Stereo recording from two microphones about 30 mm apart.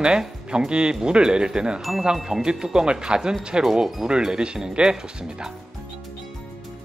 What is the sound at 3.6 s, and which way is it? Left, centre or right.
Speech, centre.